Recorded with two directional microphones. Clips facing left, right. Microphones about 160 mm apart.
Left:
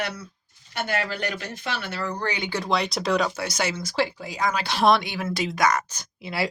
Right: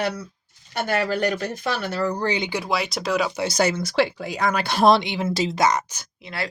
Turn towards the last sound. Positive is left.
turn(degrees=5)  # may be behind; listen again after turning